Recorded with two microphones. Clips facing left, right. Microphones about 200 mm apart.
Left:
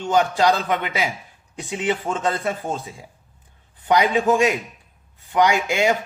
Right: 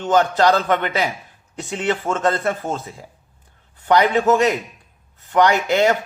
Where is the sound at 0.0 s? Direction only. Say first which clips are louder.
Right 2 dB; 10° left (ahead or behind).